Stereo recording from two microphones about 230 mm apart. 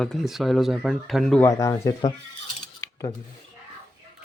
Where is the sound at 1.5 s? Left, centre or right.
Centre.